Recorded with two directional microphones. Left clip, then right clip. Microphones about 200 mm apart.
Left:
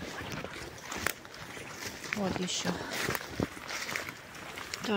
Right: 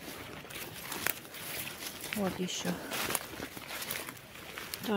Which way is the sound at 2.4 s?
15° right (ahead or behind).